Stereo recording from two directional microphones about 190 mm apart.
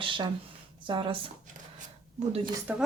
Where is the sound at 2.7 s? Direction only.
10° right (ahead or behind).